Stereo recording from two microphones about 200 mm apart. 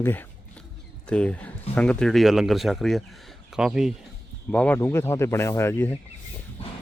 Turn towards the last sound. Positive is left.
turn(degrees=10)  # may be behind; listen again after turning